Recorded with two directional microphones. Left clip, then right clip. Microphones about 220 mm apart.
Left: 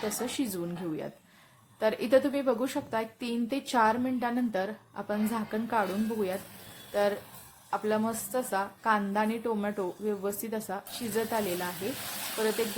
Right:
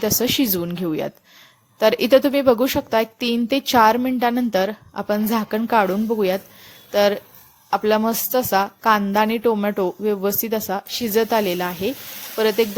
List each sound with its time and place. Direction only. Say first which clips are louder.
0.3 s a woman's voice: right 12 dB; 40° right (ahead or behind)